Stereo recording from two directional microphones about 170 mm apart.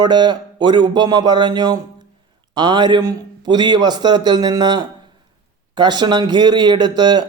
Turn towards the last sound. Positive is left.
turn(degrees=-25)  # may be behind; listen again after turning